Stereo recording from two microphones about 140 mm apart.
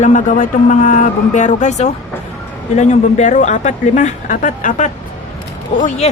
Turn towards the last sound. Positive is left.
turn(degrees=60)  # may be behind; listen again after turning